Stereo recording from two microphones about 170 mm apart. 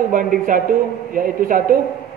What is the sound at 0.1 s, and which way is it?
Speech, 55° right (ahead or behind).